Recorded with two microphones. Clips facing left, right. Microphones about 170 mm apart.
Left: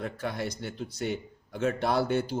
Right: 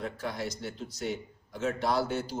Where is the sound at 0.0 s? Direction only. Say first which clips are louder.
Left 2 dB; 55° left (ahead or behind).